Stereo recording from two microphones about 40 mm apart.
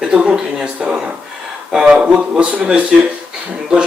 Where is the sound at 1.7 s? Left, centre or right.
Centre.